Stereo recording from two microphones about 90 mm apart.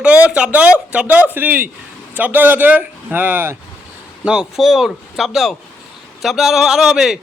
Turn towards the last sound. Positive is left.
turn(degrees=-5)  # may be behind; listen again after turning